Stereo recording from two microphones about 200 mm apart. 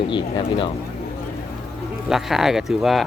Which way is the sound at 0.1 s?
25° left (ahead or behind).